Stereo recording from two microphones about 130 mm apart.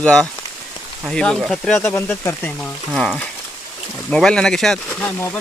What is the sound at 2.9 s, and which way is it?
Speech, centre (ahead or behind).